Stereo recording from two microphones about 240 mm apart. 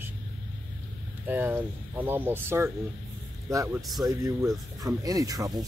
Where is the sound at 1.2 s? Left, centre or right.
Centre.